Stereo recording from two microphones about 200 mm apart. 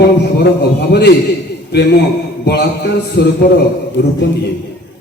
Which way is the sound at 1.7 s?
55° left (ahead or behind).